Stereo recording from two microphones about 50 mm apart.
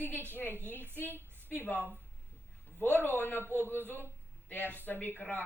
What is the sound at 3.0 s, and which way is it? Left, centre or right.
Speech, left.